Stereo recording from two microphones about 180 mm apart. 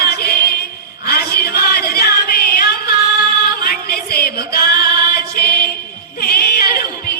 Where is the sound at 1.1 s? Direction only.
60° left (ahead or behind).